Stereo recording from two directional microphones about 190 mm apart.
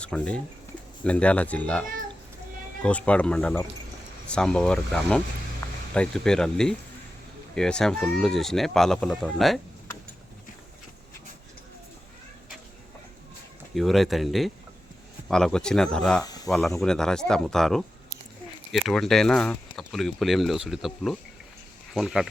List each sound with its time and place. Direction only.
0.0 s speech: 5° left (ahead or behind)
13.7 s speech: centre (ahead or behind)
16.2 s snake: 20° left (ahead or behind)
16.5 s speech: centre (ahead or behind)